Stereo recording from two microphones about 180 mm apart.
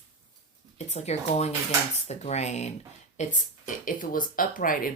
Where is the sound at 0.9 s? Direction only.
35° left (ahead or behind).